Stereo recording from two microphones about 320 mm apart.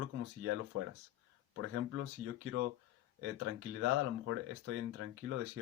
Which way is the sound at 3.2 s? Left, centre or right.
Right.